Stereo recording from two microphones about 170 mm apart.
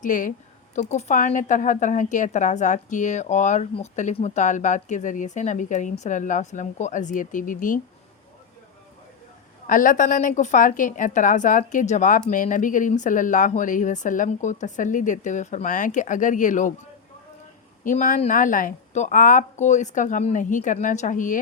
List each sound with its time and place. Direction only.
0.0 s a woman's voice: 50° left (ahead or behind)
9.6 s a woman's voice: 50° left (ahead or behind)
17.8 s a woman's voice: 50° left (ahead or behind)